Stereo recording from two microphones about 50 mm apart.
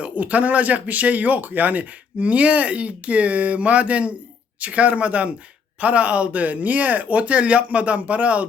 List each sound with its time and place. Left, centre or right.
0.0 s speech: right